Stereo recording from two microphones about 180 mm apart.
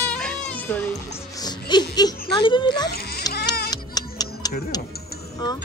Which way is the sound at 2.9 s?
60° left (ahead or behind).